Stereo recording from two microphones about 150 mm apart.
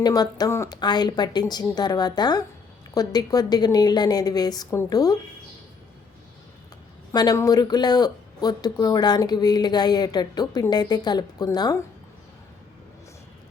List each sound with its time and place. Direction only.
0.0 s speech: 25° left (ahead or behind)
7.1 s speech: 25° left (ahead or behind)